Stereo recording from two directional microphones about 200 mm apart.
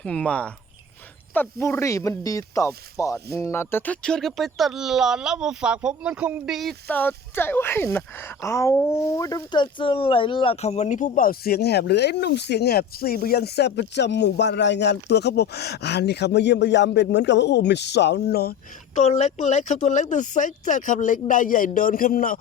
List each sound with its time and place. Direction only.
0.0 s speech: 5° left (ahead or behind); by 18.5 s 50° left (ahead or behind)
18.9 s speech: 35° left (ahead or behind)